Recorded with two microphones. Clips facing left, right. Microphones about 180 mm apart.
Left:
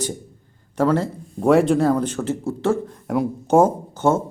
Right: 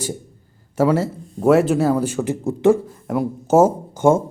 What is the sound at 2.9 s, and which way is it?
Speech, centre (ahead or behind).